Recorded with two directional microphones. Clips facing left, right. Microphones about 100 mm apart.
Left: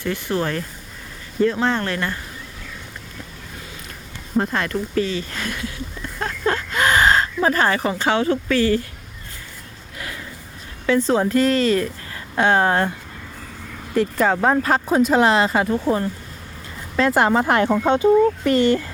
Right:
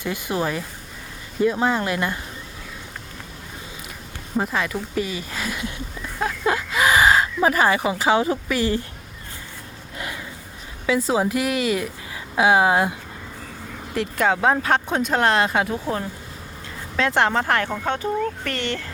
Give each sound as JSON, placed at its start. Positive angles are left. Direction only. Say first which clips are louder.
{"t": 0.0, "sound": "speech", "louder": "left 2 dB", "side_deg": -15}
{"t": 4.4, "sound": "speech", "louder": "left 2 dB", "side_deg": 0}
{"t": 6.1, "sound": "a sound", "louder": "even", "side_deg": -5}
{"t": 10.8, "sound": "speech", "louder": "left 3 dB", "side_deg": -5}
{"t": 17.0, "sound": "speech", "louder": "left 3 dB", "side_deg": 5}